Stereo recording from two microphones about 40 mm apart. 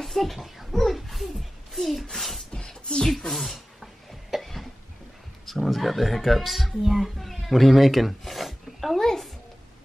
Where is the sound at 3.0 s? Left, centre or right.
Centre.